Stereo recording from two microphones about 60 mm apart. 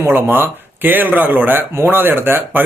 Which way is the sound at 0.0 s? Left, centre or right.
Right.